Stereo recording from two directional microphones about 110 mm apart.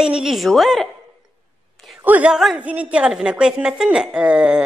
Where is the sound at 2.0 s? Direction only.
15° right (ahead or behind).